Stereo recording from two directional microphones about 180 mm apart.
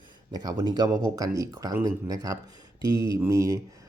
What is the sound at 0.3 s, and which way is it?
Speech, 20° right (ahead or behind).